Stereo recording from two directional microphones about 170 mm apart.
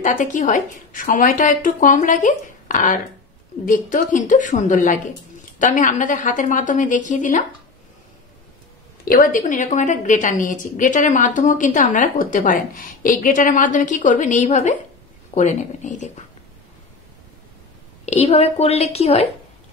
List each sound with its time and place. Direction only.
0.0 s a woman's voice: 50° left (ahead or behind)
9.0 s a woman's voice: 55° left (ahead or behind)
18.0 s a woman's voice: 40° left (ahead or behind)